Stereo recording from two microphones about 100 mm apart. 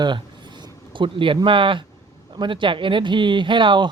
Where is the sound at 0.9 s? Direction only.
55° right (ahead or behind).